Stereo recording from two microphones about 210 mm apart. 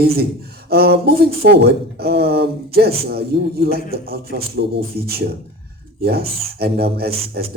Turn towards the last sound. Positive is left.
turn(degrees=-50)  # may be behind; listen again after turning